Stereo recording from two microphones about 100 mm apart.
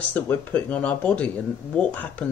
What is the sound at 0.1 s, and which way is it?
Speech, 15° left (ahead or behind).